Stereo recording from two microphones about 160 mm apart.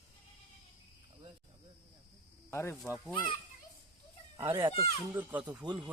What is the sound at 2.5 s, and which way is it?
Speech, 15° left (ahead or behind).